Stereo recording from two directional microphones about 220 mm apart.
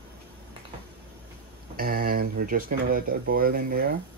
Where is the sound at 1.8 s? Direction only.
40° right (ahead or behind).